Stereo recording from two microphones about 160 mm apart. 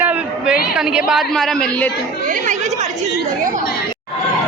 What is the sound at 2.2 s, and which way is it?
Speech, 55° right (ahead or behind).